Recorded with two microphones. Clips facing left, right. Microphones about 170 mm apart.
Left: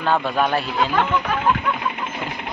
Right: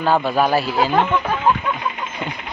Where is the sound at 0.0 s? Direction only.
5° right (ahead or behind).